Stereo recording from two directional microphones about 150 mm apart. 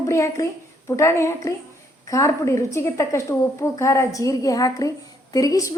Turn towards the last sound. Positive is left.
turn(degrees=25)  # may be behind; listen again after turning